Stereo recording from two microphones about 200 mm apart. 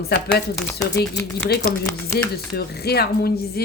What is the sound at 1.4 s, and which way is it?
A woman's voice, 55° left (ahead or behind).